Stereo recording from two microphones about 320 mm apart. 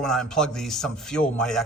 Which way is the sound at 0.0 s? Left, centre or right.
Centre.